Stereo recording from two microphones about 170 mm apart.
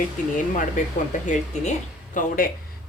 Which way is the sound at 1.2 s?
50° left (ahead or behind).